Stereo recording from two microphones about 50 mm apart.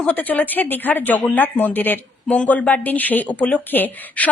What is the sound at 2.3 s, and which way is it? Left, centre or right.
A woman's voice, left.